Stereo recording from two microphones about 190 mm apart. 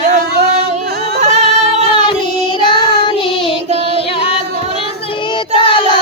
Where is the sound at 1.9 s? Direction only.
25° left (ahead or behind).